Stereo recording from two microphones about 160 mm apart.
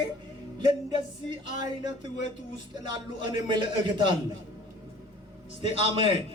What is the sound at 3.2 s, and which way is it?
Speech, 30° right (ahead or behind).